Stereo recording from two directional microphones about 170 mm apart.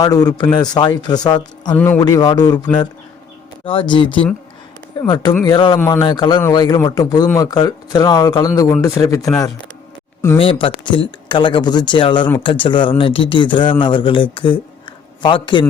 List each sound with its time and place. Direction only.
0.0 s speech: 20° left (ahead or behind)
1.7 s speech: 10° left (ahead or behind)
2.0 s speech: 25° left (ahead or behind)
3.7 s speech: 30° left (ahead or behind)
5.7 s speech: 20° left (ahead or behind)
10.3 s speech: 35° left (ahead or behind)